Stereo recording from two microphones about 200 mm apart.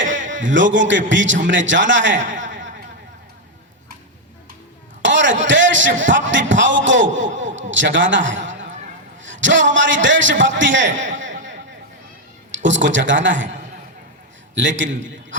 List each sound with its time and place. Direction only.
0.1 s a man's voice: 65° right (ahead or behind)
5.0 s a man's voice: 65° right (ahead or behind)
12.5 s a man's voice: 70° right (ahead or behind)
14.5 s a man's voice: 65° right (ahead or behind)